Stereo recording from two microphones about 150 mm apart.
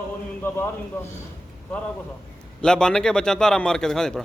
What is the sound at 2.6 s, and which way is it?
Speech, 5° left (ahead or behind).